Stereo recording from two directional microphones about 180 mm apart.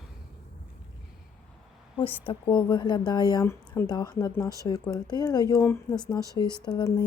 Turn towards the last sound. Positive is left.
turn(degrees=25)  # may be behind; listen again after turning